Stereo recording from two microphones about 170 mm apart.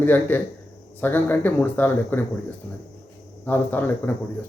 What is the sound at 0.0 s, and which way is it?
Speech, 10° left (ahead or behind).